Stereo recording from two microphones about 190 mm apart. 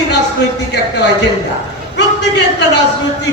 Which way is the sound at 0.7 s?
65° left (ahead or behind).